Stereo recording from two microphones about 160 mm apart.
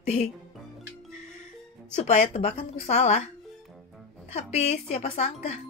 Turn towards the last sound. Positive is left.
turn(degrees=40)  # may be behind; listen again after turning